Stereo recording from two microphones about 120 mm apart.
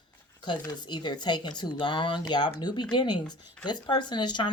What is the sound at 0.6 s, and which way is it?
Speech, 35° left (ahead or behind).